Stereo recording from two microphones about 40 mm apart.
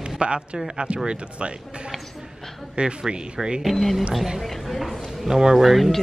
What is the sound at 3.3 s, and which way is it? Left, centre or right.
Speech, centre.